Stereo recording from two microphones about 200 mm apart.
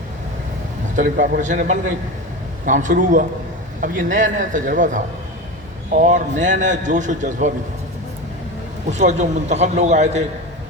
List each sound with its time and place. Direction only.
0.9 s a man's voice: 40° right (ahead or behind)
8.9 s a man's voice: 35° right (ahead or behind)